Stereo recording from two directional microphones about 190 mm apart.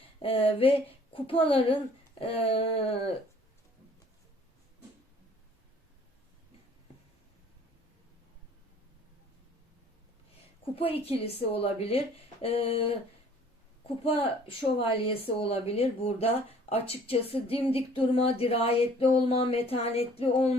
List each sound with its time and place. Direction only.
0.2 s speech: 30° left (ahead or behind)
10.8 s speech: 30° left (ahead or behind)